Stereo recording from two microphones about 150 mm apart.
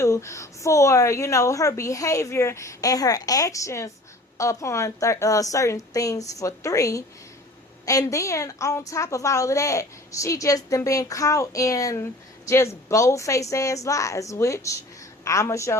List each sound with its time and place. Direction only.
0.0 s a woman's voice: 20° left (ahead or behind)